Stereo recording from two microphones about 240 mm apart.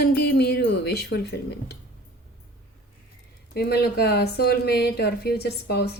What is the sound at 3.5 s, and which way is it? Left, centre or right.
A woman's voice, left.